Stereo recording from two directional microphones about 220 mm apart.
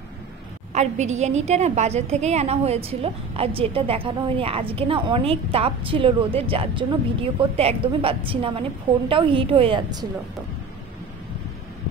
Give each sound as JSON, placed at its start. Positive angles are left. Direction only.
{"t": 0.7, "sound": "a woman's voice", "side_deg": -30}